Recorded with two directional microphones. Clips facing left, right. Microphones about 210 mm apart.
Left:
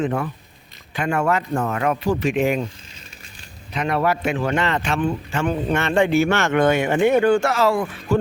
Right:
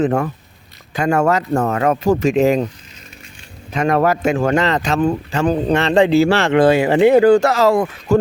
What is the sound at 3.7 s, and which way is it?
Speech, 45° right (ahead or behind).